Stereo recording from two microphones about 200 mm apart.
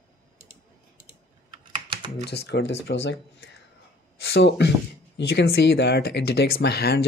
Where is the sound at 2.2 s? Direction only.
55° left (ahead or behind).